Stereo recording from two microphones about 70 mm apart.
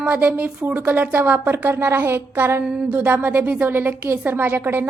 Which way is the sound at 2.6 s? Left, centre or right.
Centre.